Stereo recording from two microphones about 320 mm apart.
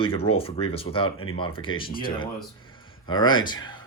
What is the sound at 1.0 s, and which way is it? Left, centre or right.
Speech, left.